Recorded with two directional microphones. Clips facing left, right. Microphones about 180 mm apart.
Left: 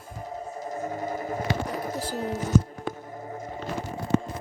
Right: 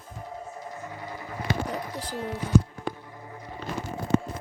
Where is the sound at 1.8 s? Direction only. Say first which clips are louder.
Left 4 dB; 40° left (ahead or behind).